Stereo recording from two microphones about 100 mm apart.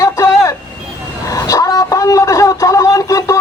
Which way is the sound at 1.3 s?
35° left (ahead or behind).